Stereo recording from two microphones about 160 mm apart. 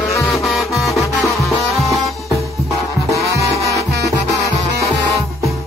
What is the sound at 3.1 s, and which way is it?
Music, 20° right (ahead or behind).